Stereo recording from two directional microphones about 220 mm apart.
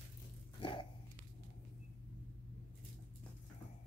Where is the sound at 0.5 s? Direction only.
25° left (ahead or behind).